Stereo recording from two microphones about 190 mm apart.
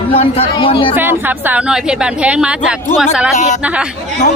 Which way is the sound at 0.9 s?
10° right (ahead or behind).